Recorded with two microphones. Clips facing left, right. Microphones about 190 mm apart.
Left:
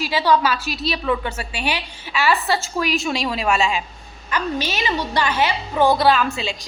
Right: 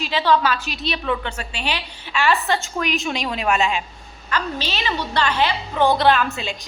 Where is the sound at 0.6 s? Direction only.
40° left (ahead or behind).